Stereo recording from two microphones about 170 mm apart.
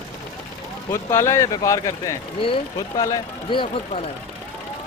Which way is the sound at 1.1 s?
15° left (ahead or behind).